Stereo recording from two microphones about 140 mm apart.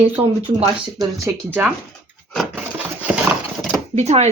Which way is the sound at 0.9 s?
25° right (ahead or behind).